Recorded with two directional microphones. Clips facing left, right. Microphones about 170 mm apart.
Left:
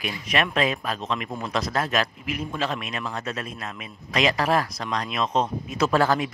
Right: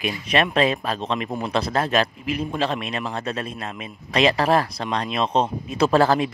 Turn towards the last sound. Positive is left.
turn(degrees=-30)  # may be behind; listen again after turning